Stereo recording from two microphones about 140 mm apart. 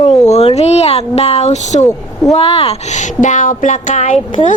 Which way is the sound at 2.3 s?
40° left (ahead or behind).